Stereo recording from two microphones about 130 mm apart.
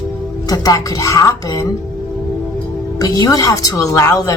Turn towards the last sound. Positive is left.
turn(degrees=25)  # may be behind; listen again after turning